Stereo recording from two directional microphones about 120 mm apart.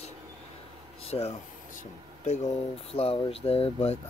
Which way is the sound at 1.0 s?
60° left (ahead or behind).